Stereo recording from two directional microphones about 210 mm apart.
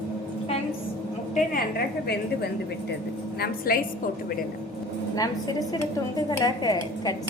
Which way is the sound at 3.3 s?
50° left (ahead or behind).